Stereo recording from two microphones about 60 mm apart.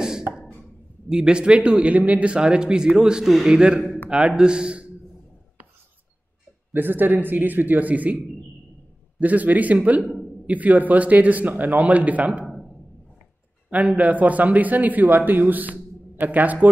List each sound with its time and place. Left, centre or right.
1.1 s speech: centre
6.7 s a man's voice: right
9.2 s a man's voice: right
13.7 s a man's voice: right